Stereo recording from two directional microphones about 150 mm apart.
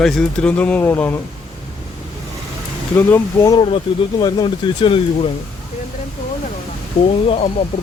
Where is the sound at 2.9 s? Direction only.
15° left (ahead or behind).